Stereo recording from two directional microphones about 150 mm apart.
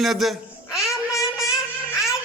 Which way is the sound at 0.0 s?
Centre (ahead or behind).